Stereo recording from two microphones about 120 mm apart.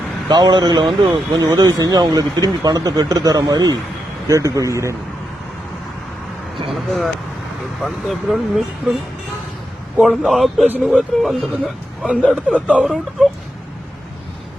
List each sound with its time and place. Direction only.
0.3 s speech: 40° right (ahead or behind)
6.7 s a man's voice: centre (ahead or behind)
10.0 s a man's voice: centre (ahead or behind)